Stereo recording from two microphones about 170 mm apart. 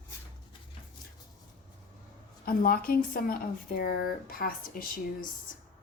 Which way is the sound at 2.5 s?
60° left (ahead or behind).